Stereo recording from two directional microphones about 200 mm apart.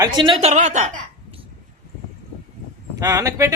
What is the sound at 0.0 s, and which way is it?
Speech, 25° right (ahead or behind).